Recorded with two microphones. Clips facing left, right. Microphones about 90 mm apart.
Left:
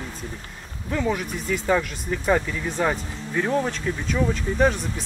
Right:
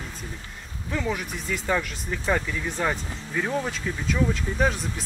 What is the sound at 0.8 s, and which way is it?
Speech, 5° left (ahead or behind).